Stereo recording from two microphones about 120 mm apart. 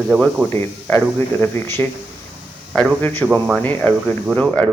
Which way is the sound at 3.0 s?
10° left (ahead or behind).